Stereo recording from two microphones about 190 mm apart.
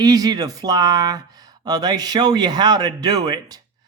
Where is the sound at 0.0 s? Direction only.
20° right (ahead or behind).